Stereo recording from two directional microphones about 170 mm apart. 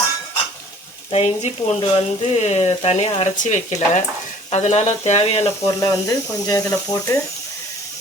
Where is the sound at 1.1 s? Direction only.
35° left (ahead or behind).